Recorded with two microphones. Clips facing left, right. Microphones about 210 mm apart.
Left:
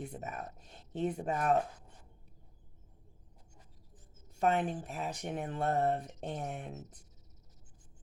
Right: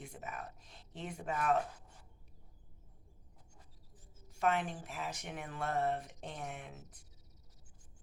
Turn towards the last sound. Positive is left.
turn(degrees=40)  # may be behind; listen again after turning